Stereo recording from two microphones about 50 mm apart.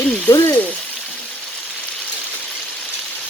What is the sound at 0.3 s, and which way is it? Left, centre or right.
Frying, left.